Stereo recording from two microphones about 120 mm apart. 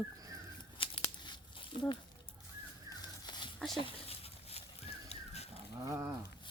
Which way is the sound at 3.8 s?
55° left (ahead or behind).